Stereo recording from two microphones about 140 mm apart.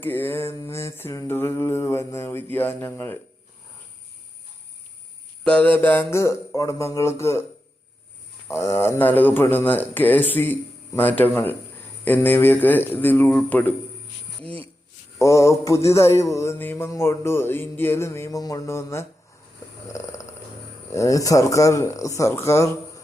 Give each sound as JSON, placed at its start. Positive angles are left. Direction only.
{"t": 0.0, "sound": "speech", "side_deg": 15}
{"t": 5.4, "sound": "music", "side_deg": 10}
{"t": 8.4, "sound": "speech", "side_deg": 20}
{"t": 15.2, "sound": "music", "side_deg": 20}
{"t": 19.9, "sound": "a sound", "side_deg": 20}
{"t": 20.9, "sound": "music", "side_deg": 25}